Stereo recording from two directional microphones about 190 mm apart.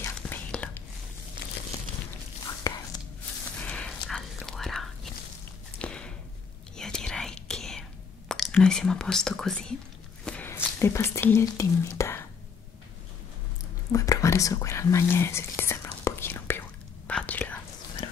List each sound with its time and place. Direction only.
0.0 s whispering: 10° left (ahead or behind)
2.6 s whispering: 15° left (ahead or behind)
3.5 s whispering: 5° left (ahead or behind)
5.8 s a sound: 5° left (ahead or behind)
6.8 s whispering: 5° left (ahead or behind)
8.3 s speech: 5° left (ahead or behind)
10.2 s whispering: 10° left (ahead or behind)
13.9 s whispering: 15° left (ahead or behind)
18.0 s whispering: 25° left (ahead or behind)